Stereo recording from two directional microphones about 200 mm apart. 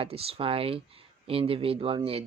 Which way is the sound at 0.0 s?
30° right (ahead or behind).